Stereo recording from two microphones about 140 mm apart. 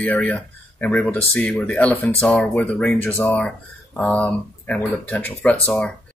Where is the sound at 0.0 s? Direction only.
10° left (ahead or behind).